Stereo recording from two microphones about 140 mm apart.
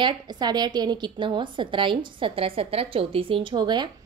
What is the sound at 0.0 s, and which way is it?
A woman's voice, 30° right (ahead or behind).